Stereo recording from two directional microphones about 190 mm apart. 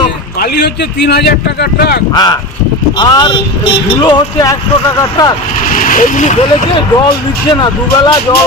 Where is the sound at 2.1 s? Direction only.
20° left (ahead or behind).